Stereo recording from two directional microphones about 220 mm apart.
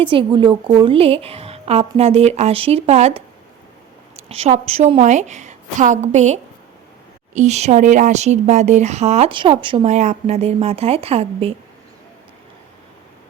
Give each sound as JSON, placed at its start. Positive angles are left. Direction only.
{"t": 0.0, "sound": "speech", "side_deg": -25}
{"t": 4.3, "sound": "a woman's voice", "side_deg": -25}